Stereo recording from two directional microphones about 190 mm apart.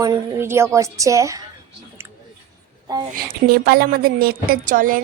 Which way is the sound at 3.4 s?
55° right (ahead or behind).